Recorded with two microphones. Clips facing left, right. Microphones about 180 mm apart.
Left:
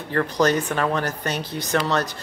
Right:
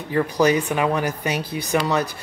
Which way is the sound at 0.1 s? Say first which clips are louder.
Right 2 dB; 10° right (ahead or behind).